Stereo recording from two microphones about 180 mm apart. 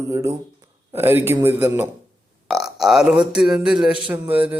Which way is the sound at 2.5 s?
Centre (ahead or behind).